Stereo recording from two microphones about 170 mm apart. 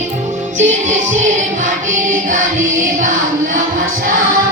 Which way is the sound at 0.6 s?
45° right (ahead or behind).